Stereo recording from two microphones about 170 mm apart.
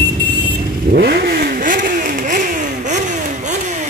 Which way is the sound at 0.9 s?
65° right (ahead or behind).